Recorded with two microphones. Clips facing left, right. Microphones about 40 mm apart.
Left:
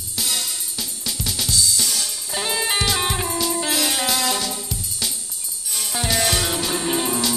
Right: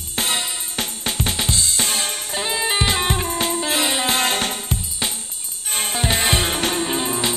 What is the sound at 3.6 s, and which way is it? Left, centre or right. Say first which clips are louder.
Music: right 2 dB; right.